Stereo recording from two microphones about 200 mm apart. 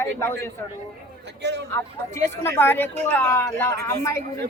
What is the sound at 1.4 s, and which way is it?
Speech, 60° right (ahead or behind).